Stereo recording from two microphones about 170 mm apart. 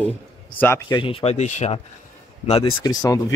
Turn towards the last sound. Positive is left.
turn(degrees=20)  # may be behind; listen again after turning